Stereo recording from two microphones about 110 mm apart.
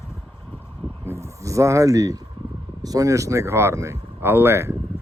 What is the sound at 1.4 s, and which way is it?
Speech, 30° right (ahead or behind).